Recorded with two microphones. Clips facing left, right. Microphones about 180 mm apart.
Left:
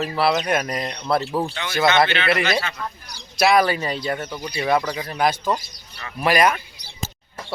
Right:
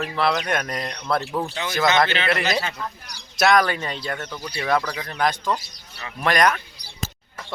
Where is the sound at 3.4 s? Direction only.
5° left (ahead or behind).